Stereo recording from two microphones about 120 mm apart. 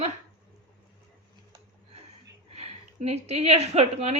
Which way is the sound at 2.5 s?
60° right (ahead or behind).